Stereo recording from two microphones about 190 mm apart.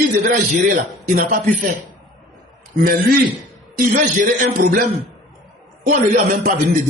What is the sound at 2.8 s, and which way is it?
A man's voice, 50° right (ahead or behind).